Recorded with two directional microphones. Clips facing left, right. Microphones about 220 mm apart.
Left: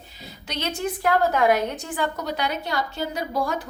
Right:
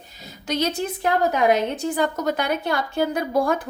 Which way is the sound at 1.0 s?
20° right (ahead or behind).